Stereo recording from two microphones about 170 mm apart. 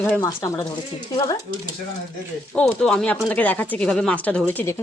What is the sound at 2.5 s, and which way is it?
Speech, 5° left (ahead or behind).